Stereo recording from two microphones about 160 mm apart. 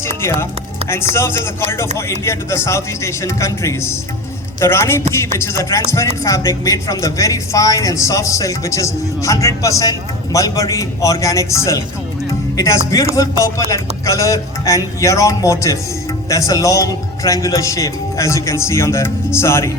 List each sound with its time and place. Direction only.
0.2 s speech: 15° left (ahead or behind)